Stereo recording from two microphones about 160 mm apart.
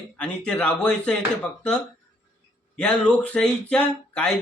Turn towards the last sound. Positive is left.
turn(degrees=5)  # may be behind; listen again after turning